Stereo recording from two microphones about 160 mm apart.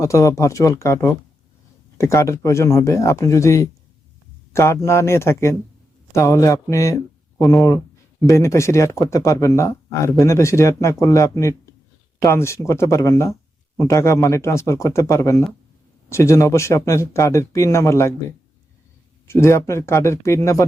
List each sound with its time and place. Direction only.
0.0 s speech: 20° left (ahead or behind)
2.0 s speech: 15° left (ahead or behind)
19.3 s speech: 15° left (ahead or behind)